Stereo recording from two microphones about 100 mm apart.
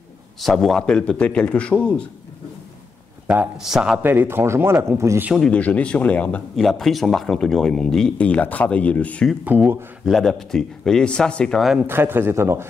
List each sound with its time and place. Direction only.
0.4 s speech: centre (ahead or behind)
3.3 s speech: 5° right (ahead or behind)
4.0 s speech: 20° right (ahead or behind)
5.5 s speech: 15° left (ahead or behind)
6.5 s speech: centre (ahead or behind)
9.5 s speech: 15° right (ahead or behind)
10.0 s speech: 5° left (ahead or behind)
11.8 s speech: 20° right (ahead or behind)